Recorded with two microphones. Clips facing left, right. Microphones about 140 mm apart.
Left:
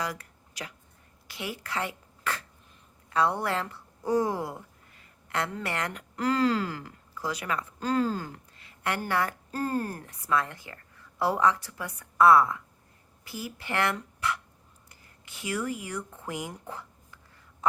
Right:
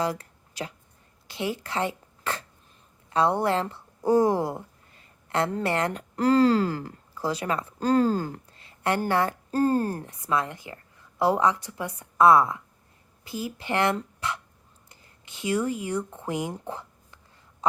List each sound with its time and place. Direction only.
0.0 s a sound: 25° right (ahead or behind)
1.3 s a woman's voice: 25° right (ahead or behind)
17.6 s duck: 20° right (ahead or behind)